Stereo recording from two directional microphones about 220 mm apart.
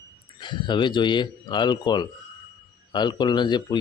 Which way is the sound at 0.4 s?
20° left (ahead or behind).